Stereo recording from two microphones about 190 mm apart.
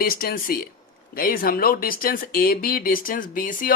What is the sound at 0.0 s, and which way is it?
Speech, 50° left (ahead or behind).